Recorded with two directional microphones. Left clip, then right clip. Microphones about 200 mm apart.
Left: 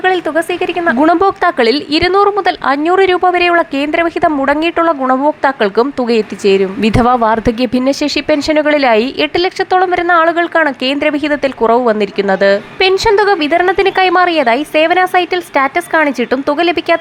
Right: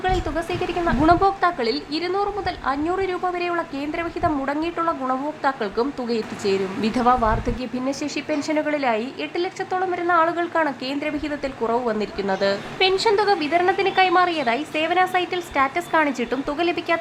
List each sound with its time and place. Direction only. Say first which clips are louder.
0.0 s a woman's voice: left 11 dB; 30° left (ahead or behind)